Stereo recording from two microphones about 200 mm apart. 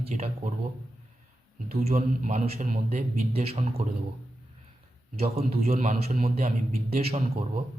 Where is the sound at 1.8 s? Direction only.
35° right (ahead or behind).